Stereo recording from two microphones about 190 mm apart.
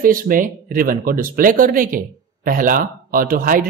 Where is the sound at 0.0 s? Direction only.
45° right (ahead or behind).